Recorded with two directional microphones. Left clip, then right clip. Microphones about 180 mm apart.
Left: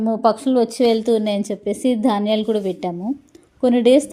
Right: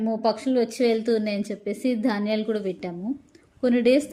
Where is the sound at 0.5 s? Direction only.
25° left (ahead or behind).